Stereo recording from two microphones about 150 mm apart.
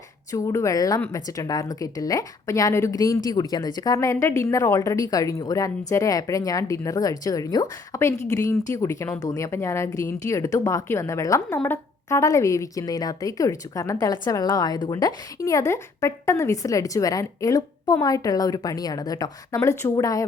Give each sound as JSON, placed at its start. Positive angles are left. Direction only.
{"t": 0.3, "sound": "a woman's voice", "side_deg": 20}